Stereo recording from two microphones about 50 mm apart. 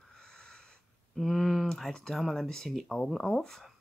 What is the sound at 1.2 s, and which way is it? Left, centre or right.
Speech, centre.